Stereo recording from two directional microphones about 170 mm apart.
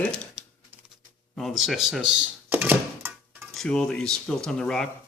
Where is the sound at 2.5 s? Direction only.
10° right (ahead or behind).